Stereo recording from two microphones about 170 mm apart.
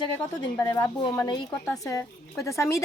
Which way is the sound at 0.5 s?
15° left (ahead or behind).